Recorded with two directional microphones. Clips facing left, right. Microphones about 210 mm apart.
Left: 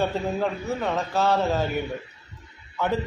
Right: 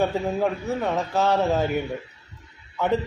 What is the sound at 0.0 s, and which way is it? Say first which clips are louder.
A man's voice: right 2 dB; 10° right (ahead or behind).